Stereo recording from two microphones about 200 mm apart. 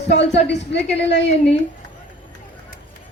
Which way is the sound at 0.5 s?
60° left (ahead or behind).